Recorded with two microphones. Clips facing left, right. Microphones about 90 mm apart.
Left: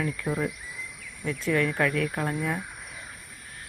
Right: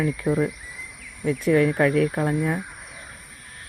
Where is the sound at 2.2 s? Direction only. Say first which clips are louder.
Right 5 dB; 5° right (ahead or behind).